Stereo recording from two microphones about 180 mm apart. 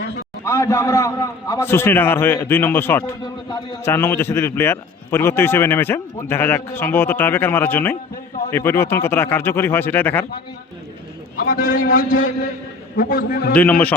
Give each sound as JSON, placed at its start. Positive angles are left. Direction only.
{"t": 0.4, "sound": "a man's voice", "side_deg": 15}
{"t": 11.3, "sound": "a man's voice", "side_deg": 50}
{"t": 13.5, "sound": "a man's voice", "side_deg": 10}